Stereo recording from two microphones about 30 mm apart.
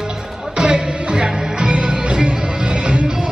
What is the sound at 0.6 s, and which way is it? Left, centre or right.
Music, right.